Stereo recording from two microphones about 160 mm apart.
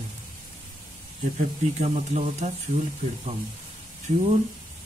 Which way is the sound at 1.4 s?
45° right (ahead or behind).